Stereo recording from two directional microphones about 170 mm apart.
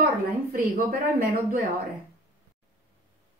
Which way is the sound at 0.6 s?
60° right (ahead or behind).